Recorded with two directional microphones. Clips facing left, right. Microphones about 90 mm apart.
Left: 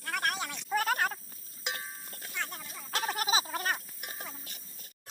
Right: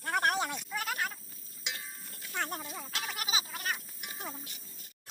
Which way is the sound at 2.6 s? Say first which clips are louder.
Right 5 dB; 30° right (ahead or behind).